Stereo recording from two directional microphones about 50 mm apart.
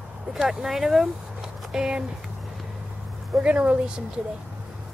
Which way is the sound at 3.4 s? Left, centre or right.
Right.